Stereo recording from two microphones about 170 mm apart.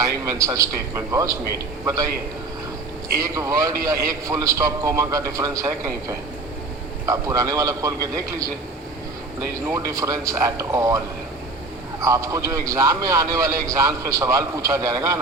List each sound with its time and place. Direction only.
0.0 s a man's voice: 20° right (ahead or behind)
3.2 s a man's voice: 20° right (ahead or behind)
9.6 s a man's voice: 20° right (ahead or behind)